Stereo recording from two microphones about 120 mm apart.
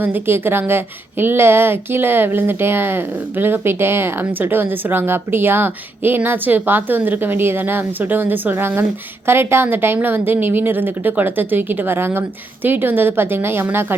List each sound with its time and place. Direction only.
0.0 s a woman's voice: 15° right (ahead or behind)